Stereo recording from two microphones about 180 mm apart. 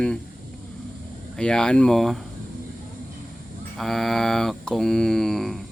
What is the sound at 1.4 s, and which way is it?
Mantra, 5° left (ahead or behind).